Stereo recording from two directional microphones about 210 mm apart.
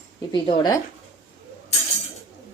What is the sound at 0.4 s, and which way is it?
Speech, 20° left (ahead or behind).